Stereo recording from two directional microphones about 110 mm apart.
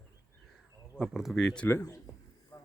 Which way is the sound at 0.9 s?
5° right (ahead or behind).